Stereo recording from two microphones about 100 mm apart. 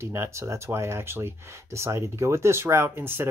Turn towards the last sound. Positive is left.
turn(degrees=-25)  # may be behind; listen again after turning